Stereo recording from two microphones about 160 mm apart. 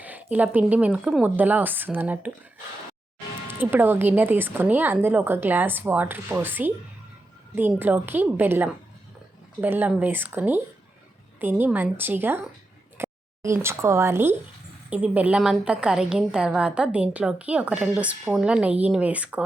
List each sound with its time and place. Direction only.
0.0 s a woman's voice: 10° right (ahead or behind)
3.4 s a woman's voice: 10° right (ahead or behind)